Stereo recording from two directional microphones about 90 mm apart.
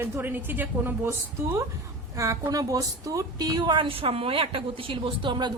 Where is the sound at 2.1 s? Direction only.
40° right (ahead or behind).